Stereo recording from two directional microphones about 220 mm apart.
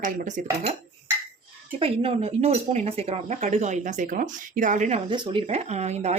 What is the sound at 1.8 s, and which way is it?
Speech, 25° right (ahead or behind).